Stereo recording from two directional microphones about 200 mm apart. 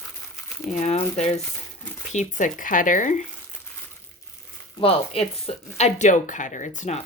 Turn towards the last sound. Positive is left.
turn(degrees=35)  # may be behind; listen again after turning